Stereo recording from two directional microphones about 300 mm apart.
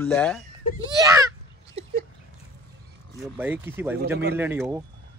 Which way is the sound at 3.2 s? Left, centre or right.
Centre.